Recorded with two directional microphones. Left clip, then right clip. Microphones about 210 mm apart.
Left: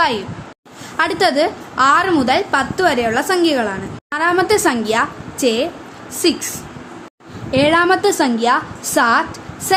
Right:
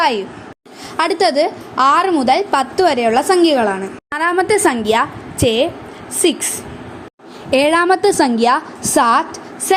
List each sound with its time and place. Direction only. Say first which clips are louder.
0.9 s a woman's voice: right 1 dB; 20° right (ahead or behind)
7.5 s a woman's voice: right 1 dB; 30° right (ahead or behind)